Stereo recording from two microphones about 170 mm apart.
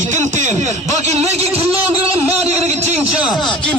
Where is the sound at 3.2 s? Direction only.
Centre (ahead or behind).